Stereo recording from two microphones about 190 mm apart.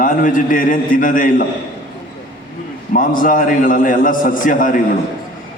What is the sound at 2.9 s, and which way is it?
A man's voice, 45° left (ahead or behind).